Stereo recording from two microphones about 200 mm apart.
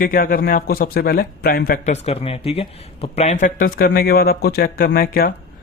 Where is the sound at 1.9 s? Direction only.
30° left (ahead or behind).